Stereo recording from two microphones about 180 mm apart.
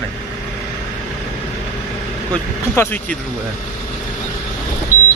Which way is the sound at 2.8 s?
10° left (ahead or behind).